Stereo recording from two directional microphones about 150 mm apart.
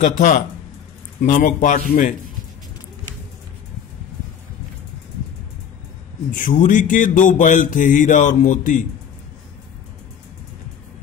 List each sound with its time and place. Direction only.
0.0 s speech: 55° left (ahead or behind)
6.3 s speech: 60° left (ahead or behind)